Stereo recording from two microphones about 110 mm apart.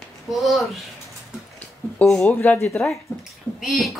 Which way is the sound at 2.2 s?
20° left (ahead or behind).